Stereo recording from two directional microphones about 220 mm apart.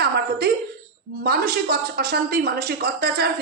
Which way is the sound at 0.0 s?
45° right (ahead or behind).